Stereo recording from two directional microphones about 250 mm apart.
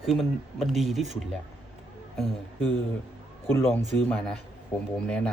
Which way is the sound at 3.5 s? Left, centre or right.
Centre.